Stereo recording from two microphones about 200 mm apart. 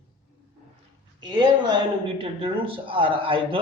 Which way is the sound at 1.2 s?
20° right (ahead or behind).